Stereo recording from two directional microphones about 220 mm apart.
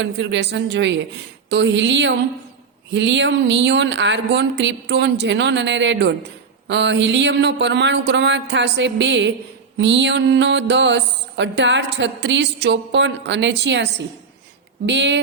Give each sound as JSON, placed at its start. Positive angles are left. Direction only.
{"t": 0.0, "sound": "a woman's voice", "side_deg": -55}
{"t": 2.9, "sound": "mantra", "side_deg": -55}
{"t": 14.8, "sound": "mantra", "side_deg": -55}